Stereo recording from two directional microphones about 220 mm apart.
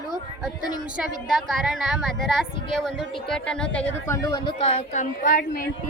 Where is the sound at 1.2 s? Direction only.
Centre (ahead or behind).